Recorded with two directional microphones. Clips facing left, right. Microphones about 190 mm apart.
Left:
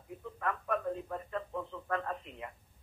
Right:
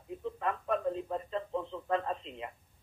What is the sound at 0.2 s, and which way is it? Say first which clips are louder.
Radio: right 2 dB; 20° right (ahead or behind).